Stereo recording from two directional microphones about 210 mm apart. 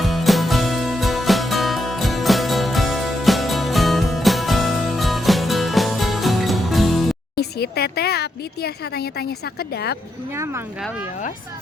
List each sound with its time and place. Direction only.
0.0 s music: centre (ahead or behind)
7.3 s speech: 50° left (ahead or behind)
10.3 s speech: 10° right (ahead or behind)